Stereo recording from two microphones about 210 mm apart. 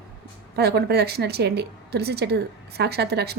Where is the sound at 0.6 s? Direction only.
50° right (ahead or behind).